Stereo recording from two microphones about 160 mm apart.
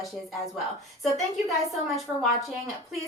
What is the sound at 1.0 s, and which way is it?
Speech, centre (ahead or behind).